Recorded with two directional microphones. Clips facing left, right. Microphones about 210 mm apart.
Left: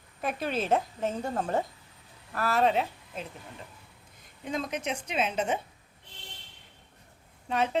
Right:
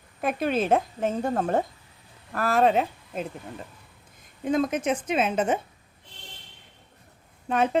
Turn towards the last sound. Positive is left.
turn(degrees=-50)  # may be behind; listen again after turning